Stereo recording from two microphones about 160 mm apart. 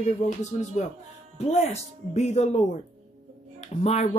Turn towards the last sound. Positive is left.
turn(degrees=40)  # may be behind; listen again after turning